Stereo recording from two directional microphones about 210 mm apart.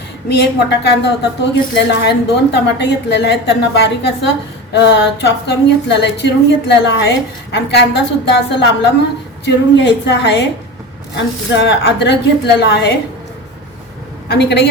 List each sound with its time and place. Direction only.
0.3 s a woman's voice: 55° left (ahead or behind)
14.3 s a woman's voice: 50° left (ahead or behind)